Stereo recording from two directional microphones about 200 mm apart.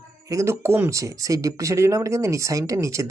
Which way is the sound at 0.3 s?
15° right (ahead or behind).